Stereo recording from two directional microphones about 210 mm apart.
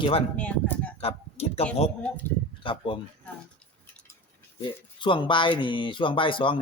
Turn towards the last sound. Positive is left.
turn(degrees=25)  # may be behind; listen again after turning